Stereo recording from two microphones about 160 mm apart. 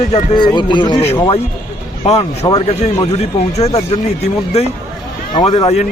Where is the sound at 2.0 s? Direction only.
40° left (ahead or behind).